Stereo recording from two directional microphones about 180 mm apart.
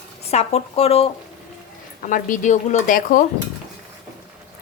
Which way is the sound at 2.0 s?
45° left (ahead or behind).